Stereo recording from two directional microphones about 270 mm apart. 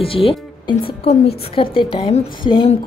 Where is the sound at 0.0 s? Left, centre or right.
Left.